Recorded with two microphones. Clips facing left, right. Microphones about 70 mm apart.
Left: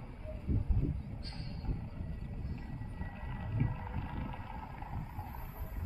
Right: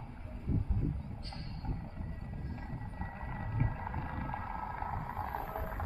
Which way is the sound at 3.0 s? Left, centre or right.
Right.